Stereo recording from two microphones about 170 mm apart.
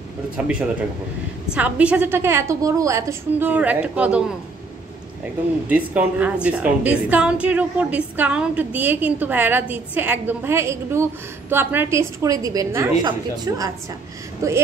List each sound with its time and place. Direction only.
1.5 s a woman's voice: 5° right (ahead or behind)
5.7 s a woman's voice: 10° right (ahead or behind)